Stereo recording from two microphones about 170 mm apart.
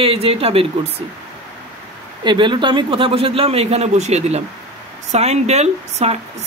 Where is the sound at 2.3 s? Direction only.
30° right (ahead or behind).